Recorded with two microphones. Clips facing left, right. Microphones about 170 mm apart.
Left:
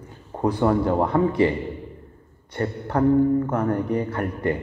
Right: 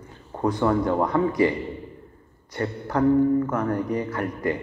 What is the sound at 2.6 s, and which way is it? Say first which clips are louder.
Speech: left 1 dB; 30° left (ahead or behind).